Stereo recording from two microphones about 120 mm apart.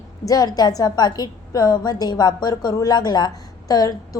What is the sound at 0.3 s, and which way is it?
A woman's voice, 30° left (ahead or behind).